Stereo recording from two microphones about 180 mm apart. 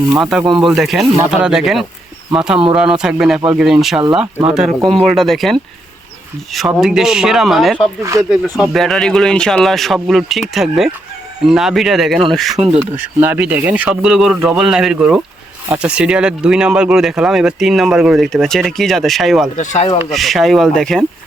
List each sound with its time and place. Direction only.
0.2 s speech: centre (ahead or behind)
13.0 s speech: 10° right (ahead or behind)
19.5 s speech: 40° left (ahead or behind)
20.1 s speech: centre (ahead or behind)